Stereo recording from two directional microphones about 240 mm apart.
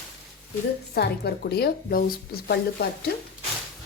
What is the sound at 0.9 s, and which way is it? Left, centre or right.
A woman's voice, left.